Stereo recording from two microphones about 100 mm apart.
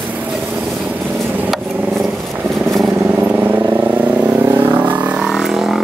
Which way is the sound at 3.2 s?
20° right (ahead or behind).